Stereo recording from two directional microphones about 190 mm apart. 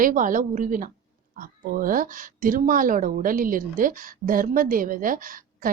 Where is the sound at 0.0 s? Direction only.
45° right (ahead or behind).